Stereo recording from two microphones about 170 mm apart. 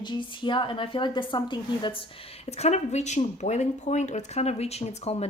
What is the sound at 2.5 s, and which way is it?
Speech, 40° left (ahead or behind).